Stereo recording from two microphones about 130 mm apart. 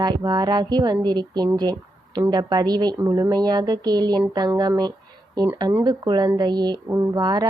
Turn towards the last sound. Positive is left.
turn(degrees=-30)  # may be behind; listen again after turning